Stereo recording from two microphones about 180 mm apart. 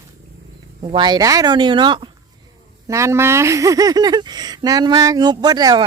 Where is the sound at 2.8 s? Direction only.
15° right (ahead or behind).